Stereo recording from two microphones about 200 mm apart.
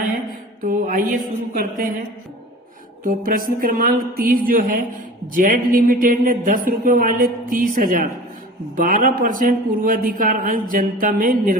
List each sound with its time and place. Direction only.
0.6 s a man's voice: 40° right (ahead or behind)
3.0 s a man's voice: 45° right (ahead or behind)